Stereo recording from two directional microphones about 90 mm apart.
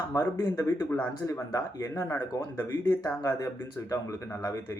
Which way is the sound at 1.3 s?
35° left (ahead or behind).